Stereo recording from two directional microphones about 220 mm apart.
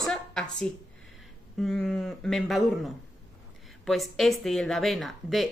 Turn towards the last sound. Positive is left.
turn(degrees=0)  # may be behind; listen again after turning